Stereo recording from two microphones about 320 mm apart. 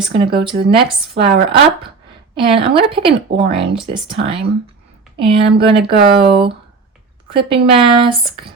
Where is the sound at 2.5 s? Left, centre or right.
Centre.